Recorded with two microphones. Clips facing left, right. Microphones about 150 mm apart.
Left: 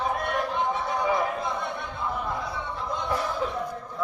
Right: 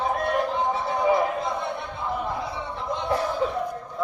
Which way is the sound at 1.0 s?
25° right (ahead or behind).